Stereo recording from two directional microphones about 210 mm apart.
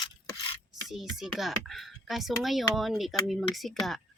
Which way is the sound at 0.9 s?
Centre (ahead or behind).